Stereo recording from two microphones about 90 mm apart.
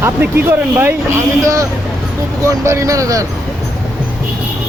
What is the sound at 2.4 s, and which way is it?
Speech, 35° right (ahead or behind).